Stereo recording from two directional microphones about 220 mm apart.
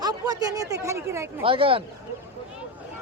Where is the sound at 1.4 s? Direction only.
25° right (ahead or behind).